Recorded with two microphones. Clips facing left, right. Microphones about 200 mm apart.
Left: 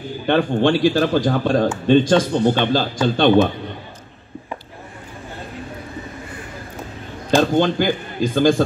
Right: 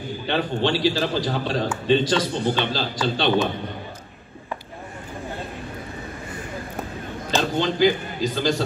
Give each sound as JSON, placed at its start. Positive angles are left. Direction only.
{"t": 0.3, "sound": "a man's voice", "side_deg": 50}
{"t": 7.5, "sound": "a man's voice", "side_deg": 50}